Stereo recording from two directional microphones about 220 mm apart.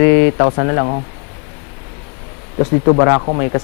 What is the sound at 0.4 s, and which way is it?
Speech, 20° left (ahead or behind).